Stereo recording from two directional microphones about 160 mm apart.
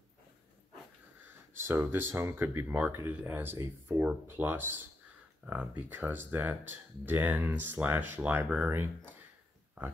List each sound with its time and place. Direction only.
1.7 s speech: 15° right (ahead or behind)